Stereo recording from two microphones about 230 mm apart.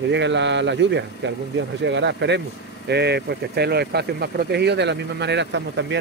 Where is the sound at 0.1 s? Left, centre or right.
Right.